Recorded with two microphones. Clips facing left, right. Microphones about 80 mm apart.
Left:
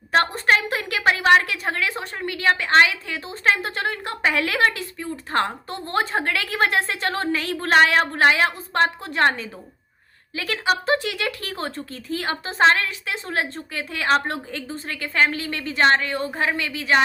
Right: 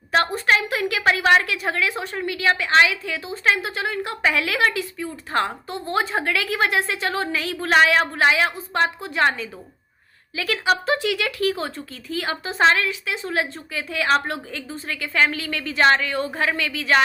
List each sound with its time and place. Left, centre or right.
0.1 s a woman's voice: left